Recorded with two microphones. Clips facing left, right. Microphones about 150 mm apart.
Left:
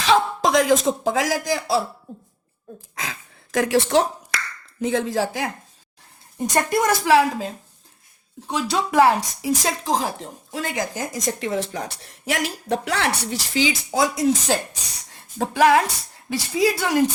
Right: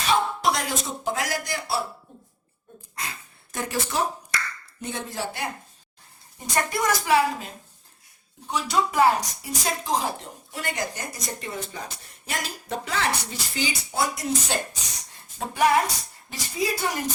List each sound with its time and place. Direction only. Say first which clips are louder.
0.0 s speech: left 4 dB; 90° left
2.9 s gasp: left 3 dB; 90° left; by 4.4 s 75° left (ahead or behind)
4.8 s a woman's voice: left 10 dB; 90° left
6.5 s a woman's voice: left 4 dB; 50° left (ahead or behind)
7.0 s a woman's voice: left 4 dB; 90° left
8.7 s a woman's voice: left 3 dB; 90° left